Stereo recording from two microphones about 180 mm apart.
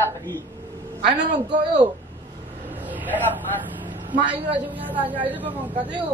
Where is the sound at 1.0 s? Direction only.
40° right (ahead or behind).